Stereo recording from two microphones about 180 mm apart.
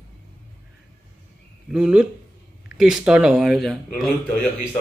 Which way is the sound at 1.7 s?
5° right (ahead or behind).